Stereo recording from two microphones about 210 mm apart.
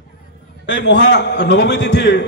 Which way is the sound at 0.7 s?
60° left (ahead or behind).